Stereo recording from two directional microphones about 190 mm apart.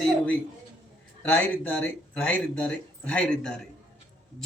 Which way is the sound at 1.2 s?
10° left (ahead or behind).